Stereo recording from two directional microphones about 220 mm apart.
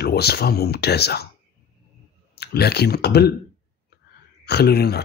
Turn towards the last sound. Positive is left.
turn(degrees=45)  # may be behind; listen again after turning